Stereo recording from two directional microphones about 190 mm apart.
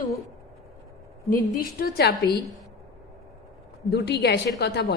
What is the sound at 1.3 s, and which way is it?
A woman's voice, 50° left (ahead or behind).